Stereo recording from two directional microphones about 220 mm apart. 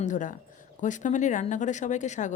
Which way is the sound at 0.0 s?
35° left (ahead or behind).